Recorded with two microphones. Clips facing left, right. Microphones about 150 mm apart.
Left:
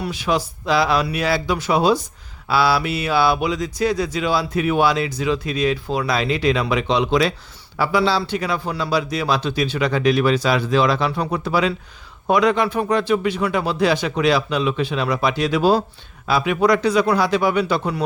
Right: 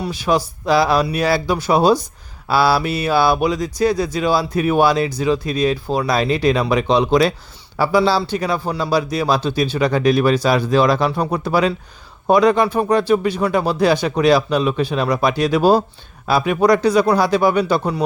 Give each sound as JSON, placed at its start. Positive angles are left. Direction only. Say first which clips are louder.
{"t": 0.0, "sound": "speech", "louder": "right 3 dB", "side_deg": -35}